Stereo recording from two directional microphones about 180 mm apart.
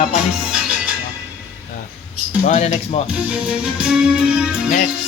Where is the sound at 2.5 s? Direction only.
40° left (ahead or behind).